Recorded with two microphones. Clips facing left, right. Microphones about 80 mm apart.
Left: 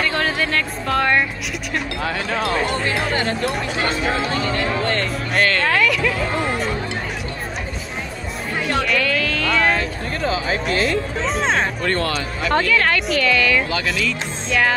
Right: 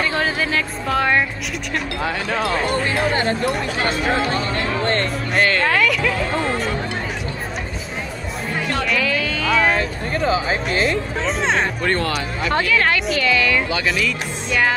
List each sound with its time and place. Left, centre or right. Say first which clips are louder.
0.0 s speech: even; centre
2.9 s speech: right 2 dB; right
5.7 s music: even; centre
8.8 s music: even; centre
11.9 s speech: right 1 dB; centre
12.4 s speech: left 1 dB; centre